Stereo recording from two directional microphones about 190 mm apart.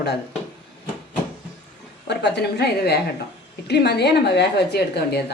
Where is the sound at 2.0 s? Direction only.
60° left (ahead or behind).